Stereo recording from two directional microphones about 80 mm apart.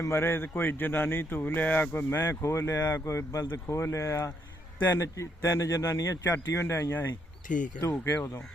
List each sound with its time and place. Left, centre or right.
0.0 s a man's voice: left
4.8 s speech: left
5.0 s a man's voice: left